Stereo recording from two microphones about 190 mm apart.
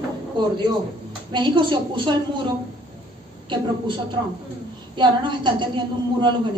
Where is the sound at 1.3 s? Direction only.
25° right (ahead or behind).